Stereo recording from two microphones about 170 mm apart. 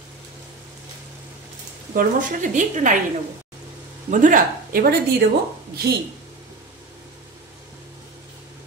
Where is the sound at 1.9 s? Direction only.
55° right (ahead or behind).